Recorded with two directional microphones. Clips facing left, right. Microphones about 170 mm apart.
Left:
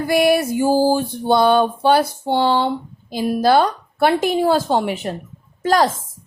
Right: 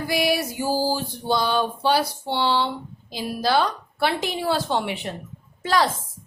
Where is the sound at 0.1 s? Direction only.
55° left (ahead or behind).